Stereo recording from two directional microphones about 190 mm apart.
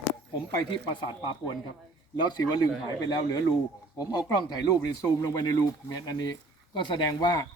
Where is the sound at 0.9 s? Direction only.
25° left (ahead or behind).